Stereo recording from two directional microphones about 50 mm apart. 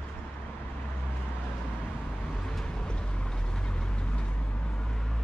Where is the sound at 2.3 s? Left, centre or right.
Centre.